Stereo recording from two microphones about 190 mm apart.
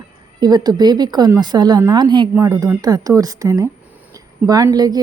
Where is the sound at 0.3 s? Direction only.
20° right (ahead or behind).